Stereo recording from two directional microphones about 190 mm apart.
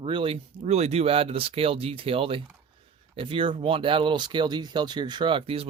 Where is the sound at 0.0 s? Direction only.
25° right (ahead or behind).